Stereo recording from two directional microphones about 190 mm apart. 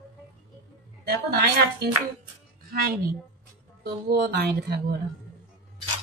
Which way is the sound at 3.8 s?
55° right (ahead or behind).